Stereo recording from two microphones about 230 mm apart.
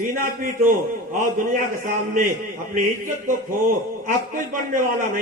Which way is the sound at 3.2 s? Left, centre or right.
Right.